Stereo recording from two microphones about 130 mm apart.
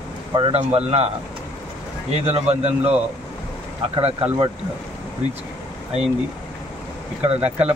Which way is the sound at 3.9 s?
50° right (ahead or behind).